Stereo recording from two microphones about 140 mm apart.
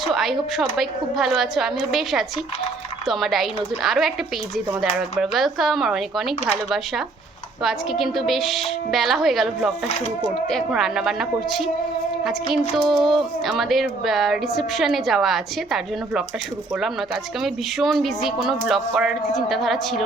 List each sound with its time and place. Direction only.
0.0 s a woman's voice: centre (ahead or behind)
12.7 s a woman's voice: centre (ahead or behind)
17.4 s a woman's voice: centre (ahead or behind)